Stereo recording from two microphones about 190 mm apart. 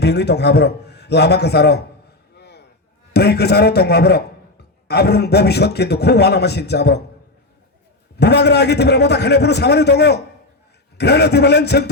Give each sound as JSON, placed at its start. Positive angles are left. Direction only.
{"t": 0.0, "sound": "a man's voice", "side_deg": 60}
{"t": 2.3, "sound": "a sound", "side_deg": 60}
{"t": 3.1, "sound": "a man's voice", "side_deg": 60}
{"t": 8.1, "sound": "a man's voice", "side_deg": 60}